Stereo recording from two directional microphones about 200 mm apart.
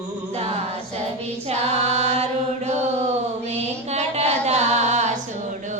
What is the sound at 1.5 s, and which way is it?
A capella, 30° right (ahead or behind).